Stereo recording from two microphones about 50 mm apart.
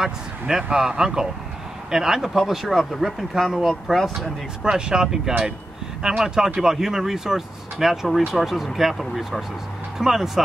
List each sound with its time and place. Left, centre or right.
0.0 s speech: centre
4.6 s speech: centre